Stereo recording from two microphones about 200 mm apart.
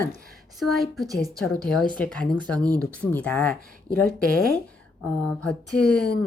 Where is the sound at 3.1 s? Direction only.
10° left (ahead or behind).